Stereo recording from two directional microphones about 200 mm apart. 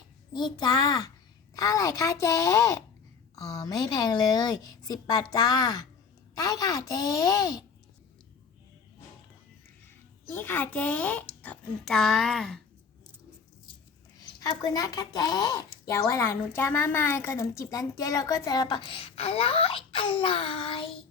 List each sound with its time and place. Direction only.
0.3 s a woman's voice: 20° left (ahead or behind)
9.8 s speech: 10° left (ahead or behind)
14.2 s a woman's voice: 20° left (ahead or behind)